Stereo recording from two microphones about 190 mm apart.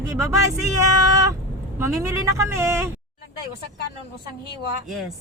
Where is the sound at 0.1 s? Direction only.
15° right (ahead or behind).